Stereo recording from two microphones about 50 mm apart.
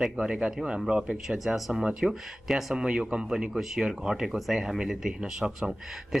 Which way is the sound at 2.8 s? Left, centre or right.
Centre.